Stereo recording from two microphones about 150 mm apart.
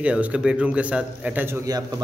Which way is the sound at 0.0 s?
10° right (ahead or behind).